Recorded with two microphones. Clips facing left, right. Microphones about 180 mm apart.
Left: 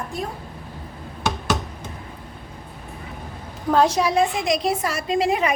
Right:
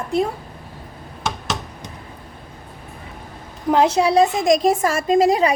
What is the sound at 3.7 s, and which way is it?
A woman's voice, 20° right (ahead or behind).